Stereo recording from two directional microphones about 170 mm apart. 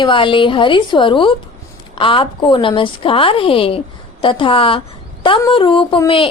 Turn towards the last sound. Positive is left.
turn(degrees=30)  # may be behind; listen again after turning